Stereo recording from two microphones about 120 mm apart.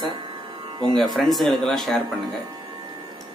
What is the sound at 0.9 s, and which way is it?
Speech, centre (ahead or behind).